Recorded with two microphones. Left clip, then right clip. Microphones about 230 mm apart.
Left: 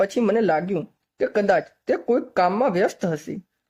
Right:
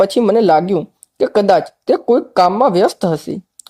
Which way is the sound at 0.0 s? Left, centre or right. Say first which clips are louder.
Right 8 dB; centre.